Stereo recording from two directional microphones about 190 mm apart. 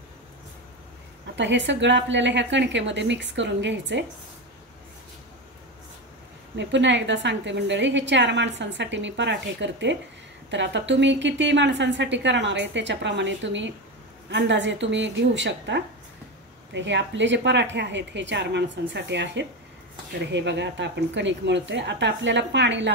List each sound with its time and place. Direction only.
1.3 s a woman's voice: 70° right (ahead or behind)
6.5 s a woman's voice: 70° right (ahead or behind)